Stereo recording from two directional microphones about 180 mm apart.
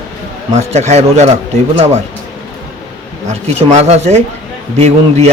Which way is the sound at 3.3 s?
35° right (ahead or behind).